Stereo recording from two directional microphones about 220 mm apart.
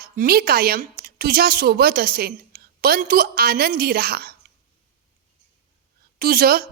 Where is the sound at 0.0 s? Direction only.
45° right (ahead or behind).